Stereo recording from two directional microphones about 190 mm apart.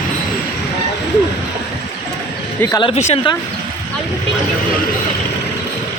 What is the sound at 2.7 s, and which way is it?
Speech, 25° left (ahead or behind).